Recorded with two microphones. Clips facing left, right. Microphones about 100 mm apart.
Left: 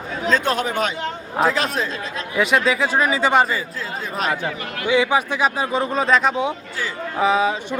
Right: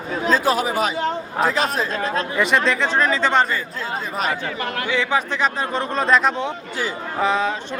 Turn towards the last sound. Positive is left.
turn(degrees=5)  # may be behind; listen again after turning